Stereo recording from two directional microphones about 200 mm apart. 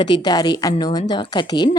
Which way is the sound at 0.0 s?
20° left (ahead or behind).